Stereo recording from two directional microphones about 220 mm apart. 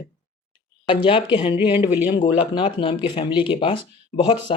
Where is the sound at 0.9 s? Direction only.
20° left (ahead or behind).